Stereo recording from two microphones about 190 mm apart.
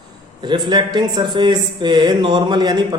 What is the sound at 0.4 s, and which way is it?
A man's voice, 20° right (ahead or behind).